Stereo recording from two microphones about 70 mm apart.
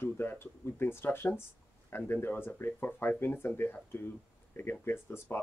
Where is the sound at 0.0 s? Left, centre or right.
Left.